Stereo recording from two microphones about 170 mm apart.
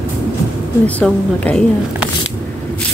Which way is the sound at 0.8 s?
10° left (ahead or behind).